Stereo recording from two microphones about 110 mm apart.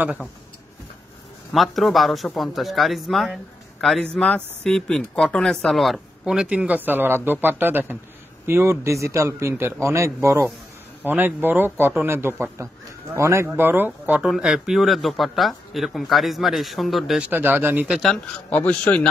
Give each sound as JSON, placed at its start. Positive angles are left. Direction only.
{"t": 1.5, "sound": "a man's voice", "side_deg": 0}
{"t": 14.3, "sound": "speech", "side_deg": -5}
{"t": 17.2, "sound": "speech", "side_deg": -15}
{"t": 17.8, "sound": "speech", "side_deg": -5}
{"t": 18.1, "sound": "a man's voice", "side_deg": 10}